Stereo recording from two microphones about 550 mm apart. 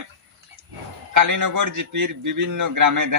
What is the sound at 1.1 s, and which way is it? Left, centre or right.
Speech, right.